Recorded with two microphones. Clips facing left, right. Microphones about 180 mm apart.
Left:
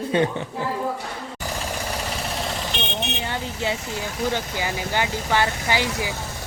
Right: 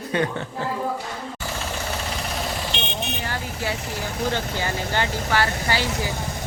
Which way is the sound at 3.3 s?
20° left (ahead or behind).